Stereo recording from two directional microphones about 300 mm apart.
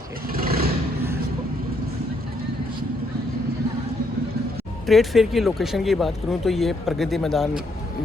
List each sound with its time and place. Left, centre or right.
0.3 s vehicle: right
4.9 s speech: centre